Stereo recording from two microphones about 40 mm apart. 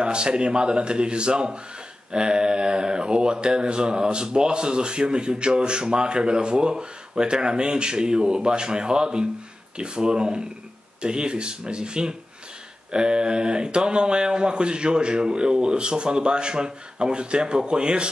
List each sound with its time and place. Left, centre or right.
0.0 s speech: right